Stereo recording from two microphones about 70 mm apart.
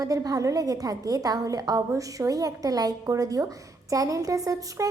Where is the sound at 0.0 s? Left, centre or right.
Right.